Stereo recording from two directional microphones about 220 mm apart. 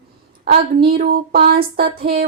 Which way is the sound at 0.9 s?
45° right (ahead or behind).